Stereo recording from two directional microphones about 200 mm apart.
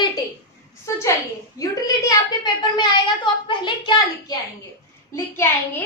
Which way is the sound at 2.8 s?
25° left (ahead or behind).